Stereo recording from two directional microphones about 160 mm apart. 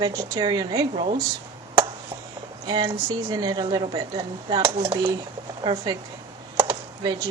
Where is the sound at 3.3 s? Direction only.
30° right (ahead or behind).